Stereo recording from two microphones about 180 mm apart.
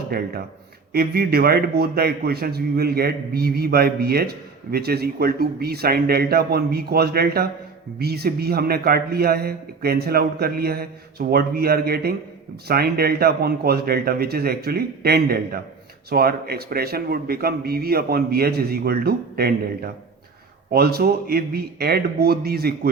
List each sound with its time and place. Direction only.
0.1 s a man's voice: 55° right (ahead or behind)